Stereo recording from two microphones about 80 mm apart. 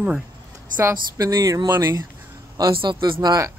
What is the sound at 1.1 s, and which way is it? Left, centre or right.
Speech, right.